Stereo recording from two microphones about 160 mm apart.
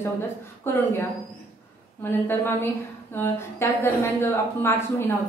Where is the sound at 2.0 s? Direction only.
15° left (ahead or behind).